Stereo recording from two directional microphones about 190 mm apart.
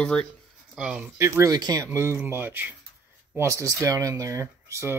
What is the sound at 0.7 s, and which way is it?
Speech, 5° right (ahead or behind).